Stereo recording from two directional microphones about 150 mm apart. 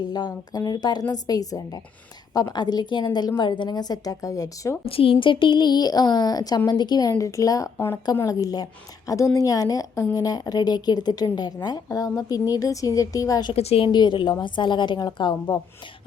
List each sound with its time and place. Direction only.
0.1 s a woman's voice: 25° left (ahead or behind)
4.9 s a woman's voice: 35° left (ahead or behind)
13.5 s a woman's voice: 40° left (ahead or behind)